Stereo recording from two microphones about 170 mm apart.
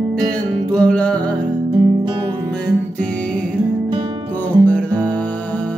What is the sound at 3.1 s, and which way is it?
Music, 5° left (ahead or behind).